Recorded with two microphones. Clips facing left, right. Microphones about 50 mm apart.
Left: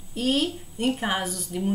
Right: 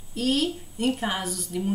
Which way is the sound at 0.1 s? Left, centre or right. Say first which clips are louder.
Even; centre.